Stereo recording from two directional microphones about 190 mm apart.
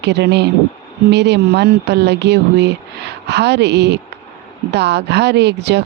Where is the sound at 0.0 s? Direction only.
65° right (ahead or behind).